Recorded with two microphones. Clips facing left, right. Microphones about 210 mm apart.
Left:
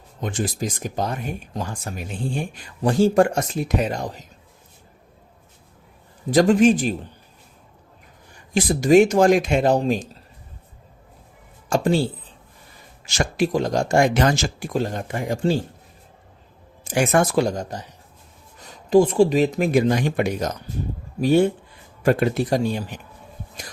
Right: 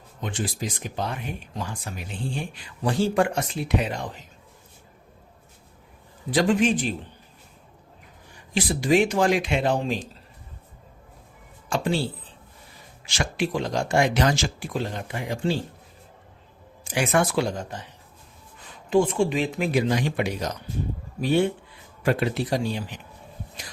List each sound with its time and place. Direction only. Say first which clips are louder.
0.2 s speech: left 4 dB; 45° left (ahead or behind)
6.3 s speech: left 6 dB; 40° left (ahead or behind)
8.5 s speech: left 6 dB; 45° left (ahead or behind)
11.7 s speech: left 5 dB; 45° left (ahead or behind)
13.1 s speech: left 5 dB; 40° left (ahead or behind)
16.8 s speech: left 4 dB; 45° left (ahead or behind)
18.9 s speech: left 6 dB; 35° left (ahead or behind)